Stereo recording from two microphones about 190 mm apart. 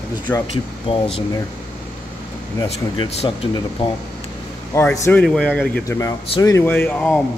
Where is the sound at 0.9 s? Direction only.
30° left (ahead or behind).